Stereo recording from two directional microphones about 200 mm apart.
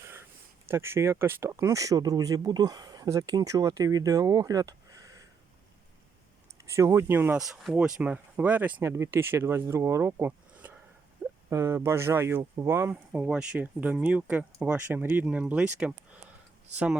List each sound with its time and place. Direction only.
0.0 s a sound: 10° right (ahead or behind)
0.7 s speech: 10° right (ahead or behind)
6.6 s speech: 15° right (ahead or behind)